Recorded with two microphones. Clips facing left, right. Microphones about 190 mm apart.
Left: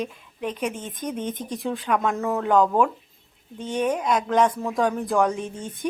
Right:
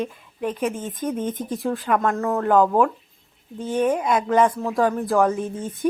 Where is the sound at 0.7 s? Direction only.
50° right (ahead or behind).